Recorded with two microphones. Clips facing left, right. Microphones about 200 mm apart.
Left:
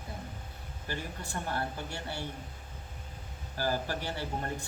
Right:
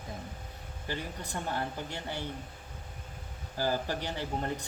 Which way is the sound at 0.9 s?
20° right (ahead or behind).